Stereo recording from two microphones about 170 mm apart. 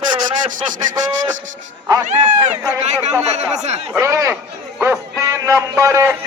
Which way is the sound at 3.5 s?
40° right (ahead or behind).